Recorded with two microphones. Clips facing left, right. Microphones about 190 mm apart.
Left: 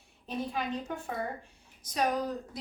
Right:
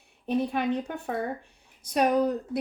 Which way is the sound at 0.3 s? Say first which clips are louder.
Right 8 dB; 65° right (ahead or behind).